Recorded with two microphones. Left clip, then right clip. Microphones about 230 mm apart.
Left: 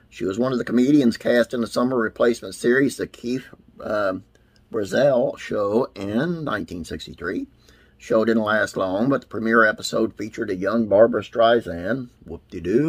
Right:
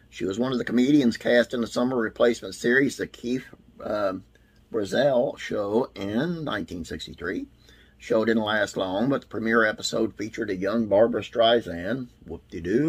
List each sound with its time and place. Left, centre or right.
0.2 s speech: centre
11.5 s speech: centre
11.9 s speech: centre